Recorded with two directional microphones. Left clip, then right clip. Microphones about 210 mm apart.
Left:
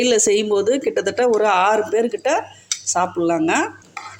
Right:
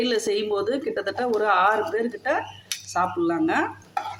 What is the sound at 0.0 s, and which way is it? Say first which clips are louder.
Speech: left 7 dB; 30° left (ahead or behind).